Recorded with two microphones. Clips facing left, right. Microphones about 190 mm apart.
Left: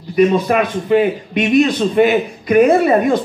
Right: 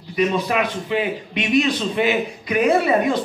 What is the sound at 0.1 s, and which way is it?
A man's voice, 50° left (ahead or behind).